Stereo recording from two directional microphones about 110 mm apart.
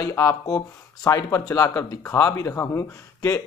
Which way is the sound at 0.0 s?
25° left (ahead or behind).